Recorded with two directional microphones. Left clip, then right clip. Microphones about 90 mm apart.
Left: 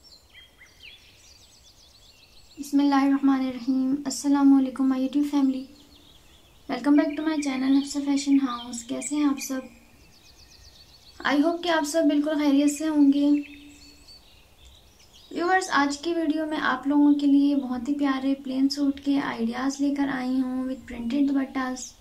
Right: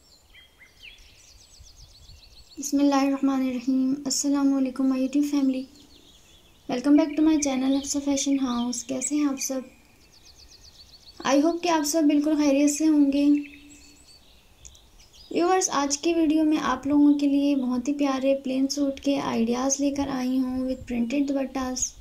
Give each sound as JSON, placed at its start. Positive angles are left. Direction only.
{"t": 2.7, "sound": "speech", "side_deg": -35}
{"t": 6.9, "sound": "a woman's voice", "side_deg": -30}
{"t": 8.8, "sound": "speech", "side_deg": -25}
{"t": 11.2, "sound": "speech", "side_deg": -20}
{"t": 15.3, "sound": "a woman's voice", "side_deg": -35}